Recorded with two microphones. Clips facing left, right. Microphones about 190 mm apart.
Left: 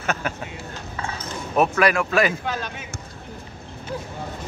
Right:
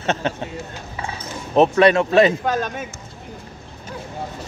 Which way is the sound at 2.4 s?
45° right (ahead or behind).